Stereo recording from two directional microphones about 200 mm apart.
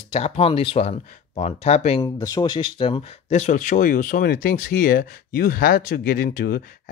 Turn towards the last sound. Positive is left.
turn(degrees=45)  # may be behind; listen again after turning